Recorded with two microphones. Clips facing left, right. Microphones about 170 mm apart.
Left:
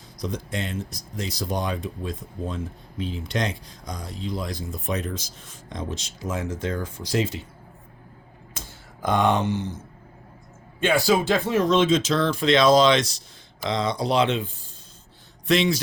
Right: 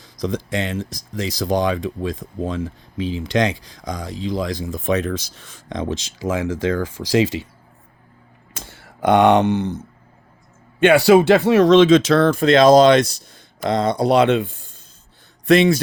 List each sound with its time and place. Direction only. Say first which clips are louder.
0.2 s speech: right 7 dB; 90° right
8.5 s a sound: right 4 dB; 70° right (ahead or behind)
10.8 s speech: right 9 dB; 70° right (ahead or behind)